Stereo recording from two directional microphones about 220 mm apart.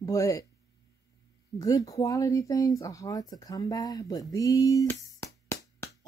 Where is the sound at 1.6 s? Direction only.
15° left (ahead or behind).